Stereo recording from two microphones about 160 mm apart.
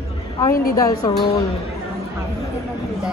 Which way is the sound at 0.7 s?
20° left (ahead or behind).